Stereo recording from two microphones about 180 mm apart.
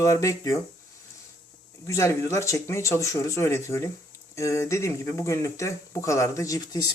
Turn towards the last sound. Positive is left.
turn(degrees=20)  # may be behind; listen again after turning